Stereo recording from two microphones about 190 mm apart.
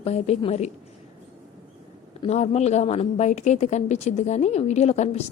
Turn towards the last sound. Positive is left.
turn(degrees=35)  # may be behind; listen again after turning